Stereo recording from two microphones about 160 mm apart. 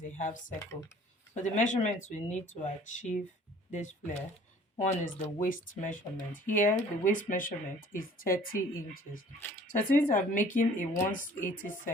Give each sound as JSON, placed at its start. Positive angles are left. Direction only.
{"t": 0.0, "sound": "speech", "side_deg": 55}